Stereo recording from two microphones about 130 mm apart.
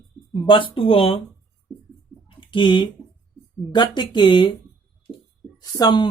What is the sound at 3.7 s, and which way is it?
Speech, 35° left (ahead or behind).